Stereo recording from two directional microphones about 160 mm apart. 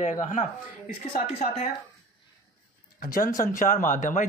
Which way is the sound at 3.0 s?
55° left (ahead or behind).